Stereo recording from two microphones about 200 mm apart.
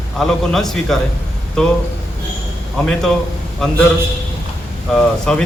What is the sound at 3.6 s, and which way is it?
Speech, centre (ahead or behind).